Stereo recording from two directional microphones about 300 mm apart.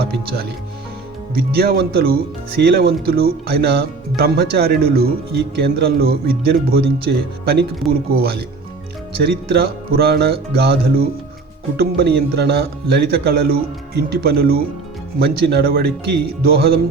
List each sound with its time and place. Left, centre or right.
1.4 s speech: right
7.9 s speech: right